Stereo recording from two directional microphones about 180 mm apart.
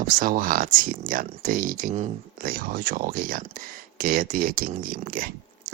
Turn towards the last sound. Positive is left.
turn(degrees=-55)  # may be behind; listen again after turning